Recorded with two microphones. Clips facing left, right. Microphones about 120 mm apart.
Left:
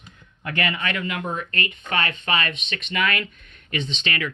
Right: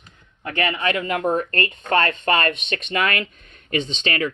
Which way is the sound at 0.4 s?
30° right (ahead or behind).